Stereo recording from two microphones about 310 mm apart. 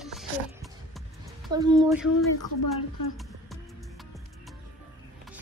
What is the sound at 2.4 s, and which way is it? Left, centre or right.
Speech, left.